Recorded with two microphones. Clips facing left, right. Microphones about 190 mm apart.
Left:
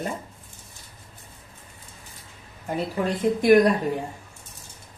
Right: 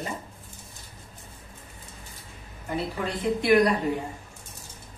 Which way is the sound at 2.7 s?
45° left (ahead or behind).